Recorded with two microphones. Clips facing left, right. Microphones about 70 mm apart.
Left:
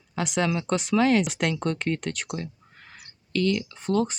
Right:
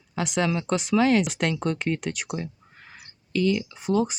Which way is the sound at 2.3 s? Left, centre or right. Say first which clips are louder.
Right 1 dB; centre.